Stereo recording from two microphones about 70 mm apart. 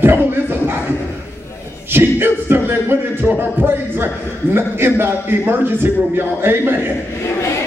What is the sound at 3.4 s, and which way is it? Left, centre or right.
A man's voice, right.